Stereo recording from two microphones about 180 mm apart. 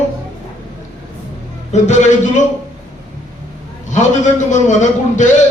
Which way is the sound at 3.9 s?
40° left (ahead or behind).